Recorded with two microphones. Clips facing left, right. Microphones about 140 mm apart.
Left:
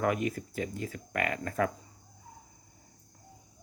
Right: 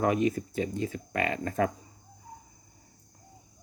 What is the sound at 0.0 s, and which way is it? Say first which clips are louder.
Speech: right 4 dB; 25° right (ahead or behind).